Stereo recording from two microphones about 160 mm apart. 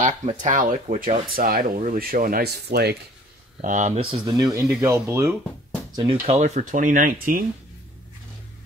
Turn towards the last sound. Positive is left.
turn(degrees=-60)  # may be behind; listen again after turning